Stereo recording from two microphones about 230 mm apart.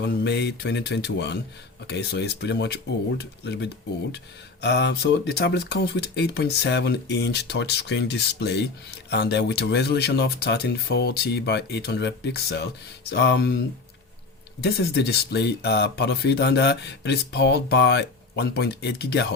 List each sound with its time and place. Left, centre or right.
0.0 s speech: left
14.6 s speech: left